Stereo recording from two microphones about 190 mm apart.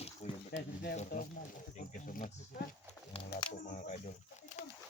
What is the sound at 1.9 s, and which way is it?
Speech, 45° left (ahead or behind).